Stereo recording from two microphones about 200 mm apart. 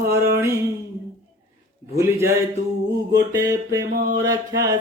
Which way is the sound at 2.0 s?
15° right (ahead or behind).